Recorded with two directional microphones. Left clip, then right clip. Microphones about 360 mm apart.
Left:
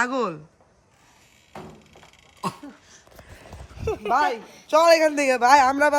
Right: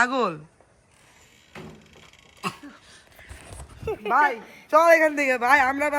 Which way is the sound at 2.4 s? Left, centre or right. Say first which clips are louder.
Left 1 dB; centre.